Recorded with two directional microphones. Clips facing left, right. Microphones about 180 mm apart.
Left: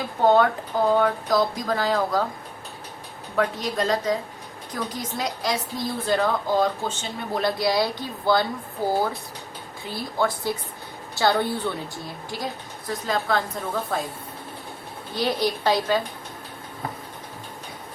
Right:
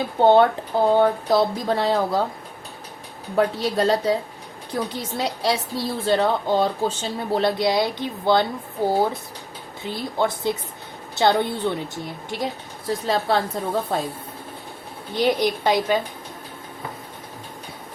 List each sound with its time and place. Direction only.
0.2 s a woman's voice: 30° right (ahead or behind)
3.3 s a woman's voice: 30° right (ahead or behind)
9.8 s a woman's voice: 20° right (ahead or behind)
12.9 s a woman's voice: 30° right (ahead or behind)
15.1 s a woman's voice: 20° right (ahead or behind)